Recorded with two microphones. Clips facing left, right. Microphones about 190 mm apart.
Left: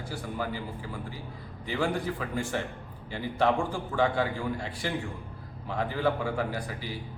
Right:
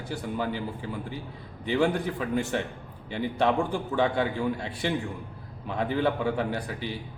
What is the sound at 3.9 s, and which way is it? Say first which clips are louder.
A man's voice: right 1 dB; 20° right (ahead or behind).